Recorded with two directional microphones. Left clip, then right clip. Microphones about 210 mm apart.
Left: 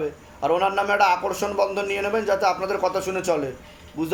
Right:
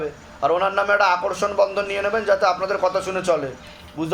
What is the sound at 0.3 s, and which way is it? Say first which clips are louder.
A man's voice: right 2 dB; 35° left (ahead or behind).